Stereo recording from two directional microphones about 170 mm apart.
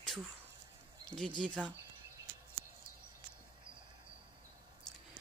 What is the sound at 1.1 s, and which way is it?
Speech, 30° right (ahead or behind).